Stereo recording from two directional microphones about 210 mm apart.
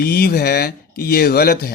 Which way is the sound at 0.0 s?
45° left (ahead or behind).